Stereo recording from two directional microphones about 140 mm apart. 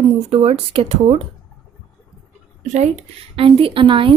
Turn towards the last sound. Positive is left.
turn(degrees=-40)  # may be behind; listen again after turning